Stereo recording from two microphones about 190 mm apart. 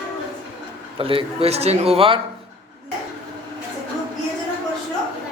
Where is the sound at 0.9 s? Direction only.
30° right (ahead or behind).